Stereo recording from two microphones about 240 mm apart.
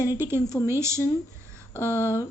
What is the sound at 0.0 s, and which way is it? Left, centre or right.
A woman's voice, centre.